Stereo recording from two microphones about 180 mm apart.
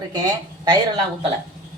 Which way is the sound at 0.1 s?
20° right (ahead or behind).